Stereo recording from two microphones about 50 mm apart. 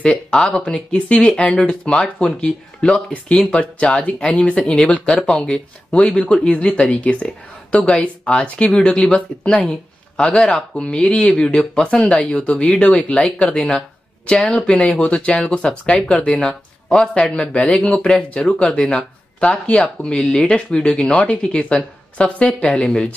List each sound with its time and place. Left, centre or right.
0.0 s speech: left
3.8 s speech: left
4.8 s speech: left
16.4 s speech: centre